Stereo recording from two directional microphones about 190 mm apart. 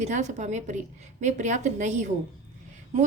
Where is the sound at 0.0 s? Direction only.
40° right (ahead or behind).